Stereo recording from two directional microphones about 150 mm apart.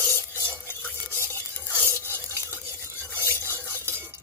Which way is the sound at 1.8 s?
15° right (ahead or behind).